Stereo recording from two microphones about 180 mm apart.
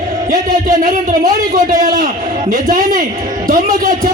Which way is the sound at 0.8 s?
50° right (ahead or behind).